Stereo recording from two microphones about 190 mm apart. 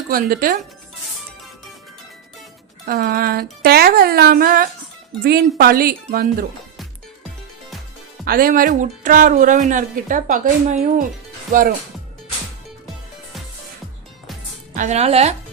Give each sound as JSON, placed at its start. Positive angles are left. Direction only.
{"t": 0.1, "sound": "speech", "side_deg": -50}
{"t": 2.8, "sound": "speech", "side_deg": -55}
{"t": 8.2, "sound": "speech", "side_deg": -50}
{"t": 14.8, "sound": "speech", "side_deg": -35}